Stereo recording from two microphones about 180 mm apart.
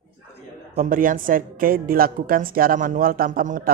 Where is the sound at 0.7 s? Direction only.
50° right (ahead or behind).